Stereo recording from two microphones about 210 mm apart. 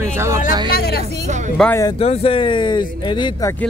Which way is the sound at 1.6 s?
15° left (ahead or behind).